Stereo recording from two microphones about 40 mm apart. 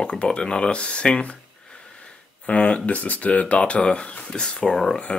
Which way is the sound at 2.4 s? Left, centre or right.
Left.